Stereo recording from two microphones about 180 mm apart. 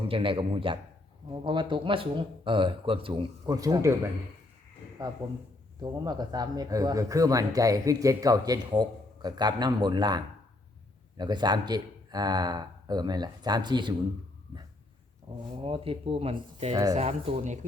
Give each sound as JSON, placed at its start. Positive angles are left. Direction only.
{"t": 0.1, "sound": "speech", "side_deg": -30}
{"t": 5.8, "sound": "speech", "side_deg": -20}
{"t": 15.3, "sound": "speech", "side_deg": -25}
{"t": 16.7, "sound": "speech", "side_deg": -20}
{"t": 17.0, "sound": "speech", "side_deg": -35}